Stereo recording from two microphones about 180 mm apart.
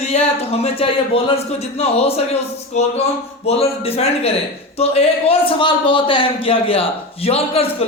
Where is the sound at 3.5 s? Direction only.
35° left (ahead or behind).